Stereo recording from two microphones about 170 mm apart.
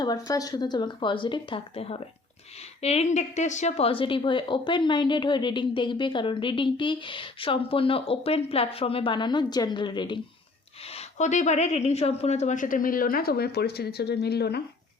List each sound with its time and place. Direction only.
0.0 s a woman's voice: 20° left (ahead or behind)
10.8 s a woman's voice: 40° left (ahead or behind); by 14.6 s 75° left (ahead or behind)